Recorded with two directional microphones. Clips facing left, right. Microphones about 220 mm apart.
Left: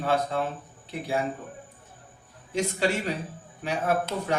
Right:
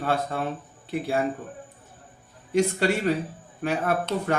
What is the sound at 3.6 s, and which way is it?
Speech, 55° right (ahead or behind).